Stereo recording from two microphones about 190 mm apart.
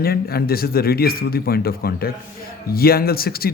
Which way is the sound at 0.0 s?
55° left (ahead or behind).